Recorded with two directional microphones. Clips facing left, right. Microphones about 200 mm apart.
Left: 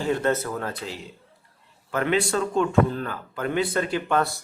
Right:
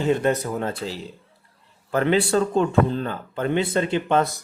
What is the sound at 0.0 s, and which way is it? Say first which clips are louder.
Speech: right 3 dB; 20° right (ahead or behind).